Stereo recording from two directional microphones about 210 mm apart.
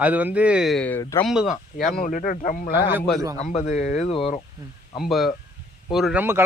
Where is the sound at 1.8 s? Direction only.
40° left (ahead or behind).